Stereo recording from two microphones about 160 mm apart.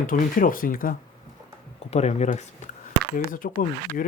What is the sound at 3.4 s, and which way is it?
Speech, 65° left (ahead or behind).